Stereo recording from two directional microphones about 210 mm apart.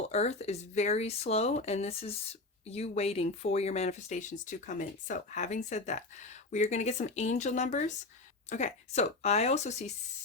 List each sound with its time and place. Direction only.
0.1 s speech: 30° left (ahead or behind)